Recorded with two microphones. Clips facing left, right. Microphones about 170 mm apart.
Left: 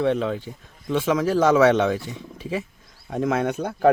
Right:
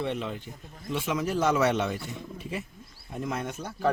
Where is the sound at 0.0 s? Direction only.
90° left.